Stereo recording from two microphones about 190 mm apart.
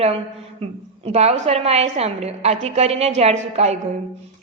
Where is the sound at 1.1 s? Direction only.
35° right (ahead or behind).